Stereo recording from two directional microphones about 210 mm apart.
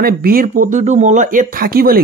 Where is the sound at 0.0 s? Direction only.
45° right (ahead or behind).